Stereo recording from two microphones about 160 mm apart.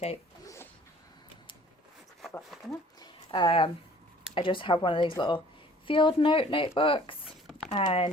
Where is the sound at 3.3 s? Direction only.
30° left (ahead or behind).